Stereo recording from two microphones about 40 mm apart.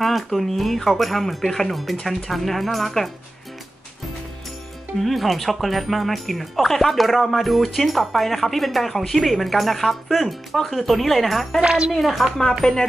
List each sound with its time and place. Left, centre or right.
0.3 s speech: centre
5.0 s speech: centre